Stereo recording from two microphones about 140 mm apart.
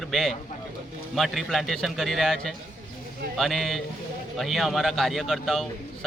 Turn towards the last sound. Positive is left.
turn(degrees=0)  # may be behind; listen again after turning